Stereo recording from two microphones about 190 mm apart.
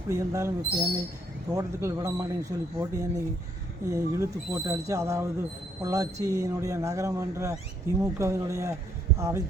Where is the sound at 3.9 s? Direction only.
15° right (ahead or behind).